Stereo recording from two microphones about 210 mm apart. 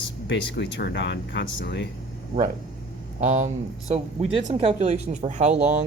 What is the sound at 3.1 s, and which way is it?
Speech, 35° right (ahead or behind).